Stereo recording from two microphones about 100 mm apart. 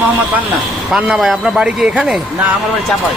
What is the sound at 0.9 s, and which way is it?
Speech, 5° right (ahead or behind).